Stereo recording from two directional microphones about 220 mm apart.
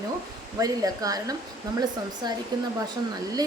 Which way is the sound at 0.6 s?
15° right (ahead or behind).